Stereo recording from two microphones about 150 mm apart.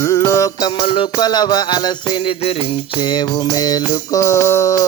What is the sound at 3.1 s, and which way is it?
Mantra, 25° left (ahead or behind).